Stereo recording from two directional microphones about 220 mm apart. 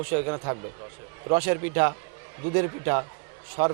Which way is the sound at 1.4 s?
15° right (ahead or behind).